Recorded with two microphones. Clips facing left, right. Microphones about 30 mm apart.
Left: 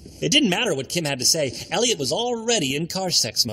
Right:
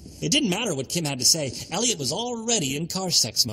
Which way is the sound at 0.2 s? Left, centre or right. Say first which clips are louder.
Left 4 dB; left.